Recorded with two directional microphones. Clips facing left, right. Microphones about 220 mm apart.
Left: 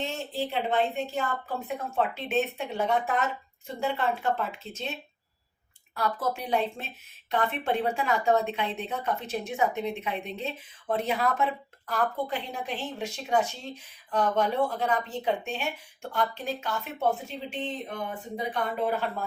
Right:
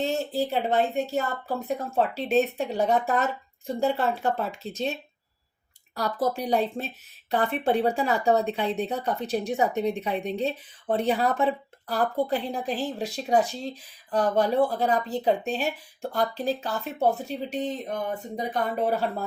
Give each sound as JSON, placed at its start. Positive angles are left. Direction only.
{"t": 0.0, "sound": "speech", "side_deg": -40}